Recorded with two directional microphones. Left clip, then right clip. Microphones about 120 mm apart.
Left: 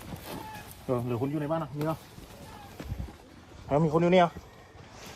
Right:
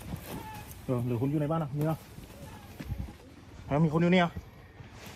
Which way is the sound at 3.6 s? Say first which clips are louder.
Left 4 dB; 65° left (ahead or behind).